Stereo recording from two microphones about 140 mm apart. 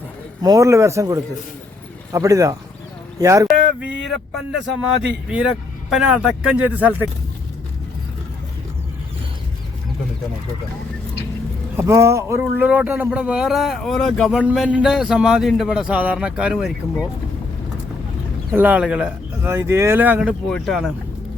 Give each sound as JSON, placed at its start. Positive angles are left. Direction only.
{"t": 0.4, "sound": "speech", "side_deg": -25}
{"t": 3.8, "sound": "speech", "side_deg": -5}
{"t": 11.8, "sound": "speech", "side_deg": -20}
{"t": 18.5, "sound": "speech", "side_deg": -10}
{"t": 20.5, "sound": "speech", "side_deg": 0}